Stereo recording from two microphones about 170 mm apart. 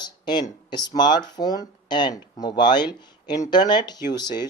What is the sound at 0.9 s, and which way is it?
Speech, 25° left (ahead or behind).